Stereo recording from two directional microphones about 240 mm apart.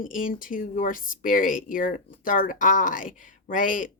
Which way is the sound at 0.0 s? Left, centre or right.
Left.